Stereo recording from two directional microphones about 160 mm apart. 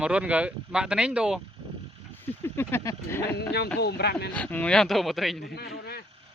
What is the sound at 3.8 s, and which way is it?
Speech, 90° left.